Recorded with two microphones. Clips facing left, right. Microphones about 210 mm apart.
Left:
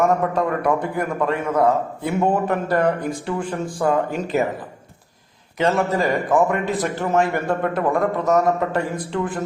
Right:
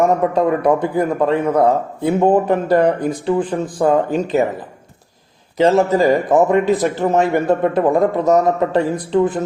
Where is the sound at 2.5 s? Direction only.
35° right (ahead or behind).